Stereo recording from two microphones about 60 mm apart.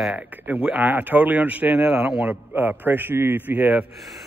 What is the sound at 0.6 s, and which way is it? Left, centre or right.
Speech, right.